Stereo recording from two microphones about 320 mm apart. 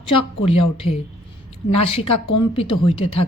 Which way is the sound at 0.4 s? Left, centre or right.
Centre.